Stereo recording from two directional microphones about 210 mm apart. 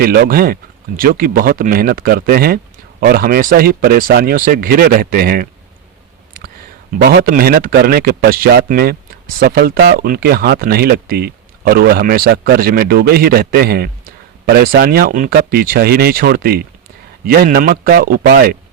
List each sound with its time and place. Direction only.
0.0 s a man's voice: 45° right (ahead or behind)
7.0 s a man's voice: 45° right (ahead or behind)